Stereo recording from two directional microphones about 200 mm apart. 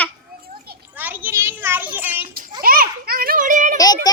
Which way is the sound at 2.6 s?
45° right (ahead or behind).